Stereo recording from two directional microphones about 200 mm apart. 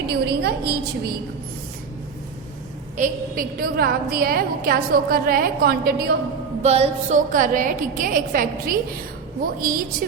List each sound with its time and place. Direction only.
0.1 s a woman's voice: 55° right (ahead or behind)
3.0 s a woman's voice: 45° right (ahead or behind)
6.6 s a woman's voice: 30° right (ahead or behind)